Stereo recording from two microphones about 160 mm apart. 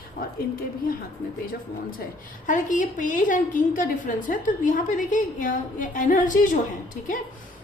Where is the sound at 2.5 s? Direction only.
55° left (ahead or behind).